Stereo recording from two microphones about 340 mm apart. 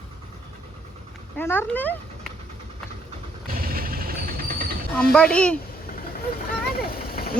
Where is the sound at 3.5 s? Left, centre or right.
Right.